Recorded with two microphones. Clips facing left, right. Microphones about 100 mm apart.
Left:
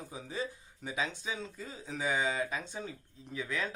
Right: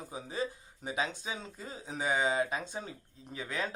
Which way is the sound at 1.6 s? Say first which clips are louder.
Right 2 dB; 45° right (ahead or behind).